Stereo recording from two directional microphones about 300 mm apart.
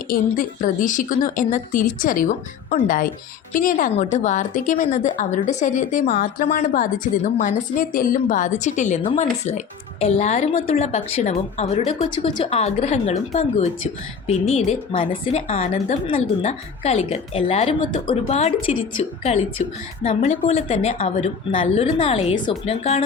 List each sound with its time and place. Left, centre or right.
0.1 s a woman's voice: left